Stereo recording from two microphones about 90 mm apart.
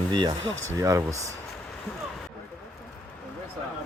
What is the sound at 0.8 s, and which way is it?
Speech, 35° right (ahead or behind).